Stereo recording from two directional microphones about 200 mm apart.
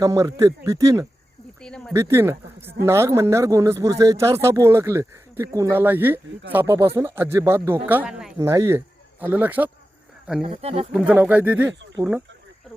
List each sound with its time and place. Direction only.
0.0 s speech: 15° right (ahead or behind)
1.6 s a sound: 5° left (ahead or behind)
1.9 s speech: 15° right (ahead or behind)
8.4 s speech: 15° right (ahead or behind)
10.4 s speech: 30° right (ahead or behind)
10.9 s speech: 5° right (ahead or behind)